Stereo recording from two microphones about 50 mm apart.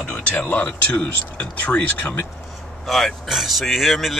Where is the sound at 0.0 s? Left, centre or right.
Left.